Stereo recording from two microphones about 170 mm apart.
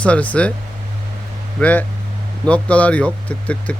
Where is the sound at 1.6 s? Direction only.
10° left (ahead or behind).